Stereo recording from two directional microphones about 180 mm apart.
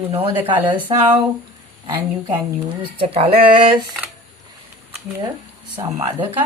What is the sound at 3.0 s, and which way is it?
Speech, 30° right (ahead or behind).